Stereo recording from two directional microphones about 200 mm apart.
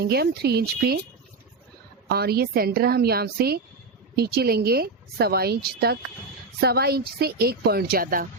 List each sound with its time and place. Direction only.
0.0 s a woman's voice: 50° right (ahead or behind)
2.0 s a woman's voice: 50° right (ahead or behind)